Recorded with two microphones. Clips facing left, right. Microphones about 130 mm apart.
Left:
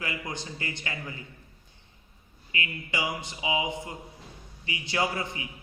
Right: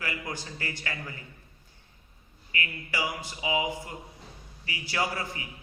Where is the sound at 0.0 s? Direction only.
20° left (ahead or behind).